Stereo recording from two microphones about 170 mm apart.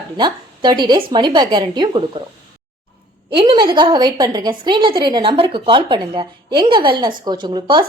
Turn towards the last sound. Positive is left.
turn(degrees=-25)  # may be behind; listen again after turning